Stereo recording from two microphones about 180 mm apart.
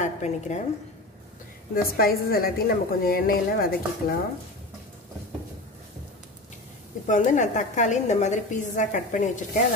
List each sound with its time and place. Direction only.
0.0 s a woman's voice: 40° left (ahead or behind)
2.0 s a woman's voice: 55° left (ahead or behind)
7.1 s a woman's voice: 45° left (ahead or behind)